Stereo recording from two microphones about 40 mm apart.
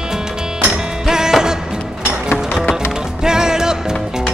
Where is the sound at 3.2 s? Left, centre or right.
Centre.